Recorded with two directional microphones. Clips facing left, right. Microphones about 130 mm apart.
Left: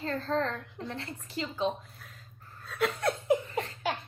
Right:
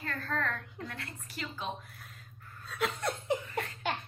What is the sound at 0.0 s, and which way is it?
A woman's voice, 25° left (ahead or behind).